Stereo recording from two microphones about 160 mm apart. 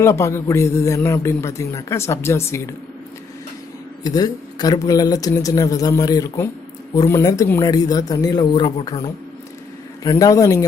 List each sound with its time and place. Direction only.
0.0 s a man's voice: 15° left (ahead or behind)
4.0 s speech: 25° left (ahead or behind)